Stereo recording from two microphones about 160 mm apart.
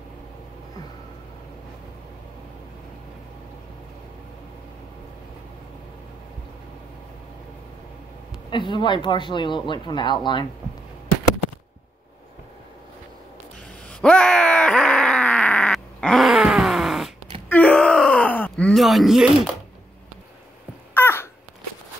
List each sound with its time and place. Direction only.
8.5 s speech: 30° left (ahead or behind)
13.8 s groan: 5° left (ahead or behind)
17.5 s groan: 10° left (ahead or behind)
20.9 s a sound: 15° left (ahead or behind)